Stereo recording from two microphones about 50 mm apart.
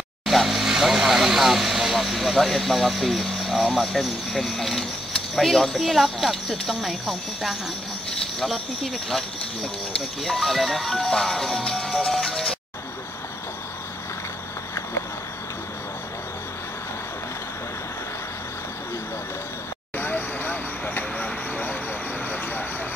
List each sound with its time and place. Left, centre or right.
0.2 s speech: centre
20.0 s vehicle: left